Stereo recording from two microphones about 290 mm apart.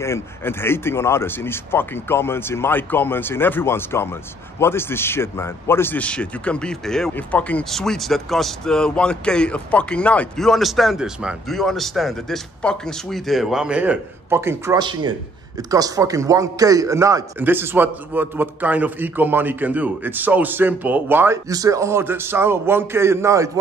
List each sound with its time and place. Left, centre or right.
0.0 s a man's voice: centre